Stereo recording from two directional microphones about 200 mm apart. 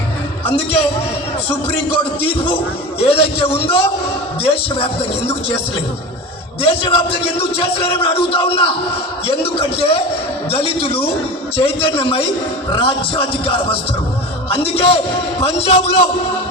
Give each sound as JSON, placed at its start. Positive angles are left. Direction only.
{"t": 0.4, "sound": "a man's voice", "side_deg": 30}
{"t": 2.2, "sound": "a man's voice", "side_deg": 25}
{"t": 6.6, "sound": "a man's voice", "side_deg": 30}